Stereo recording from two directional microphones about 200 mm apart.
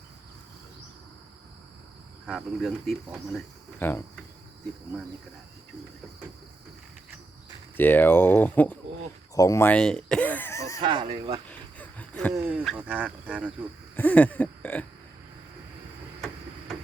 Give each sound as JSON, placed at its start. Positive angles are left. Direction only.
{"t": 2.2, "sound": "speech", "side_deg": 0}
{"t": 7.8, "sound": "speech", "side_deg": 10}
{"t": 10.8, "sound": "speech", "side_deg": -25}
{"t": 11.4, "sound": "a sound", "side_deg": 5}
{"t": 12.3, "sound": "speech", "side_deg": -10}
{"t": 13.9, "sound": "a sound", "side_deg": 10}